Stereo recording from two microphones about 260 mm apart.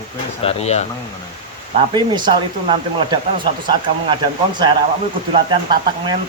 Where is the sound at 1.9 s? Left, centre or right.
Centre.